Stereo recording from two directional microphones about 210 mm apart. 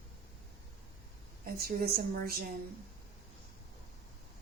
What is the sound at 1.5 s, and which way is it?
Speech, 45° right (ahead or behind).